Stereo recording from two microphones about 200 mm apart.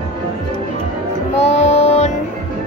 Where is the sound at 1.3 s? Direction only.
35° left (ahead or behind).